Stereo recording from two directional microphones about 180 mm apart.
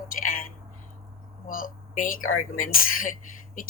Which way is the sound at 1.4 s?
50° left (ahead or behind).